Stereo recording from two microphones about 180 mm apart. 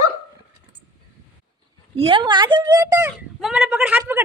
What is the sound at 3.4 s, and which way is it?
Speech, 5° right (ahead or behind).